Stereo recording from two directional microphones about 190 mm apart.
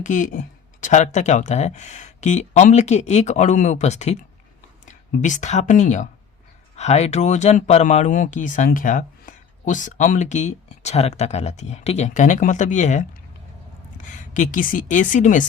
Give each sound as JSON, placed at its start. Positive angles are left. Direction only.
{"t": 0.0, "sound": "speech", "side_deg": 45}